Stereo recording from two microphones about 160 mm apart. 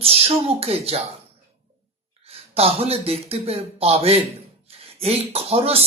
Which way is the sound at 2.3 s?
40° right (ahead or behind).